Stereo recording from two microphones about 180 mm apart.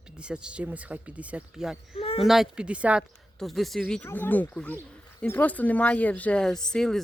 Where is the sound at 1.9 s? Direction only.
30° left (ahead or behind).